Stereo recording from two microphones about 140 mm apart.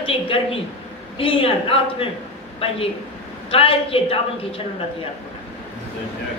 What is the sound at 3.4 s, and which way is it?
A woman's voice, 40° left (ahead or behind).